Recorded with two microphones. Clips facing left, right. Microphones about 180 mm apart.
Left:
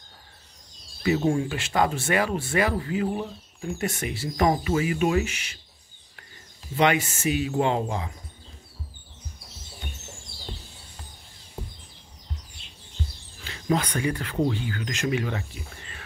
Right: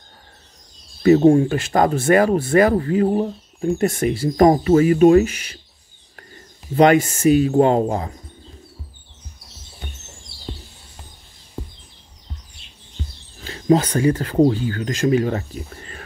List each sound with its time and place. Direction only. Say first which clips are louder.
1.0 s speech: right 11 dB; 45° right (ahead or behind)
6.8 s speech: right 9 dB; 45° right (ahead or behind)
13.4 s speech: right 9 dB; 40° right (ahead or behind)